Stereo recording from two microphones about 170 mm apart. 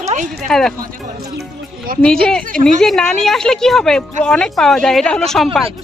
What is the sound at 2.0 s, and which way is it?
Speech, 5° left (ahead or behind).